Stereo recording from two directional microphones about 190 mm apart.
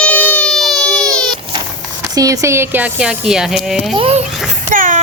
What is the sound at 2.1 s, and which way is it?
Speech, 20° right (ahead or behind).